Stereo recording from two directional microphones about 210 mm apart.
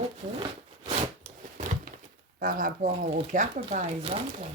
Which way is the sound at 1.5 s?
35° right (ahead or behind).